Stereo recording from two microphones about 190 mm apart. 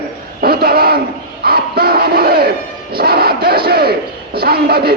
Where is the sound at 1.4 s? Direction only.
55° right (ahead or behind).